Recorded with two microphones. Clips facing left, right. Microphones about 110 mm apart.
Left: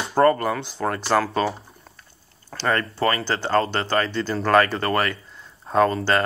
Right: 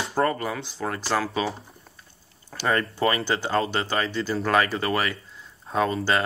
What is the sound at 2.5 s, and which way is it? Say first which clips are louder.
Speech: left 1 dB; 15° right (ahead or behind).